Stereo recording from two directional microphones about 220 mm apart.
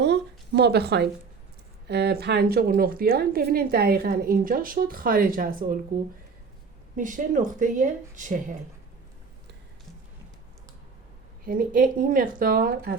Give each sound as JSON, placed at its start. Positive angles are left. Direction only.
{"t": 0.0, "sound": "a sound", "side_deg": -50}
{"t": 1.9, "sound": "a woman's voice", "side_deg": -50}
{"t": 6.9, "sound": "speech", "side_deg": -35}
{"t": 11.4, "sound": "speech", "side_deg": -40}